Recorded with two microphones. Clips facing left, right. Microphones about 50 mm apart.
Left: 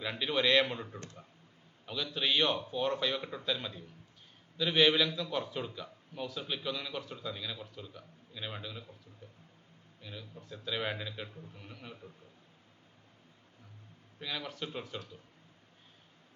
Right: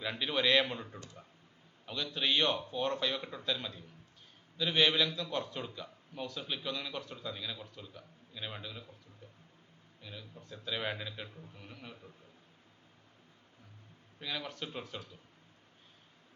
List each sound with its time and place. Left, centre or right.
0.0 s a man's voice: centre
10.0 s a man's voice: centre
14.2 s a man's voice: centre